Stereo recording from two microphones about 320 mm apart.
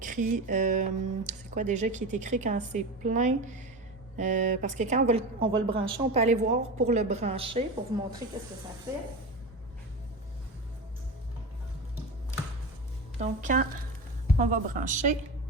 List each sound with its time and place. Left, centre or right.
0.0 s speech: right
13.1 s speech: right